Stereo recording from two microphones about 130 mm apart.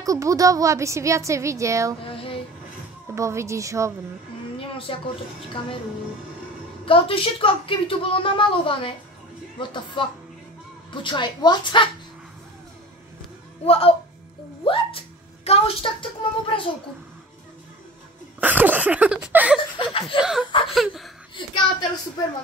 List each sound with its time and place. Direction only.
0.0 s speech: 25° right (ahead or behind)
2.0 s child singing: 45° left (ahead or behind)
3.2 s speech: 20° right (ahead or behind)
4.6 s a woman's voice: 45° left (ahead or behind)
6.9 s speech: 45° left (ahead or behind)
13.7 s speech: 50° left (ahead or behind)
14.6 s a sound: 45° left (ahead or behind)
18.4 s a sound: 15° right (ahead or behind)
19.8 s speech: 45° left (ahead or behind)
20.2 s laughter: 5° right (ahead or behind)
20.6 s a sound: centre (ahead or behind)
22.2 s speech: 30° left (ahead or behind)